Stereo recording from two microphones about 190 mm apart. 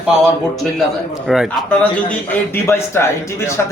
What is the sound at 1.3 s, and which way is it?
Speech, centre (ahead or behind).